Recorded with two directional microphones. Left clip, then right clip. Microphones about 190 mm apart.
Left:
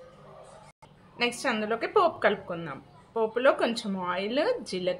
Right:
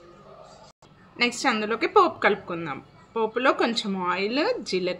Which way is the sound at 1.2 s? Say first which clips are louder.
Right 4 dB; 30° right (ahead or behind).